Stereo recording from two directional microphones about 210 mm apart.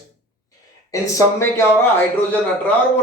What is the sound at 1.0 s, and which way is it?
Speech, 15° left (ahead or behind).